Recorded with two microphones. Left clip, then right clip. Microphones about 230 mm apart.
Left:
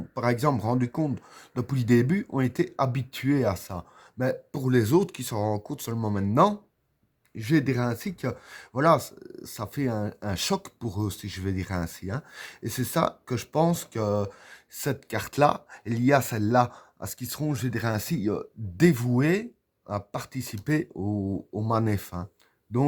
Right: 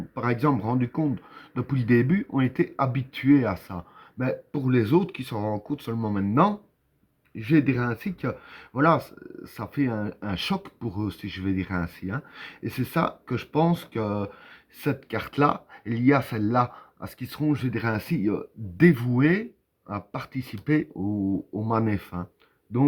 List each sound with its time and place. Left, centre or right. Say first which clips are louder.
0.1 s speech: even; left